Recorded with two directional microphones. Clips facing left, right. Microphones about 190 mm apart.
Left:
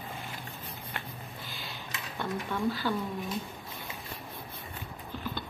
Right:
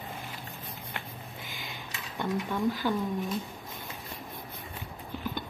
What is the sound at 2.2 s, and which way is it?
Speech, 15° right (ahead or behind).